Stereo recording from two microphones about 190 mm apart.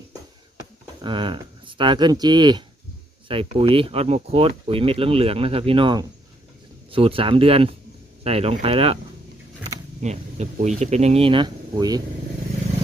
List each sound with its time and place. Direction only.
1.0 s speech: 25° right (ahead or behind)
10.0 s speech: 35° right (ahead or behind); by 12.0 s 20° right (ahead or behind)